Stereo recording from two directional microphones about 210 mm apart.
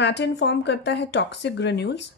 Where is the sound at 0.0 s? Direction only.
55° left (ahead or behind).